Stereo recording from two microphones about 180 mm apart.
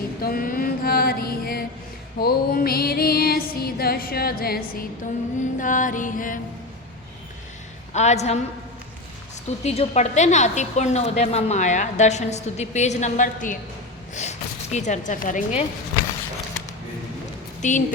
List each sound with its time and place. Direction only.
0.2 s mantra: 55° left (ahead or behind)
2.1 s music: 60° left (ahead or behind)
5.4 s mantra: 45° left (ahead or behind)
7.9 s a woman's voice: 40° left (ahead or behind)
9.6 s a woman's voice: 35° left (ahead or behind)
17.6 s a woman's voice: 45° left (ahead or behind)